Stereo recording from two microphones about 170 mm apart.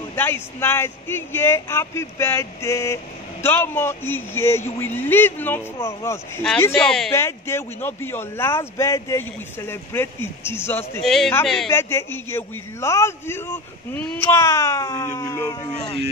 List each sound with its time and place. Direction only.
0.1 s a man's voice: 15° left (ahead or behind)
11.0 s a man's voice: centre (ahead or behind)
11.7 s a man's voice: 15° left (ahead or behind)